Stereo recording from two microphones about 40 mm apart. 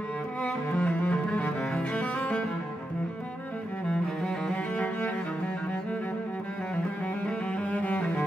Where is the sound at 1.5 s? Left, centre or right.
Centre.